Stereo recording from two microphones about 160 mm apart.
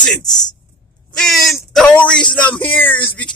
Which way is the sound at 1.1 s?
Centre (ahead or behind).